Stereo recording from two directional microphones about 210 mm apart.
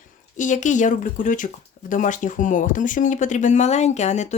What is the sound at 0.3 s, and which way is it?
Speech, 35° left (ahead or behind).